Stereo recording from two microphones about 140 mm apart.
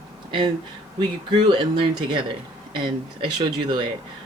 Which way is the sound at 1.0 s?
35° right (ahead or behind).